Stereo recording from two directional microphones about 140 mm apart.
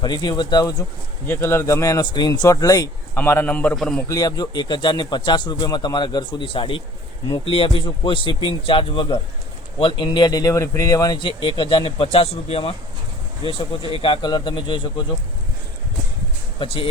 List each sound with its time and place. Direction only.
0.0 s speech: 30° left (ahead or behind)
1.3 s speech: 15° left (ahead or behind)
3.2 s a man's voice: 15° left (ahead or behind)
4.1 s speech: 25° left (ahead or behind)
16.6 s speech: 40° left (ahead or behind)